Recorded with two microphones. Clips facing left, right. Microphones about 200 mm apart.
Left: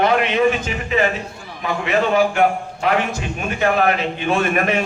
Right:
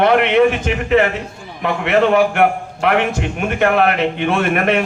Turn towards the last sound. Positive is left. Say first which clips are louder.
# right 2 dB
turn(degrees=-60)  # may be behind; listen again after turning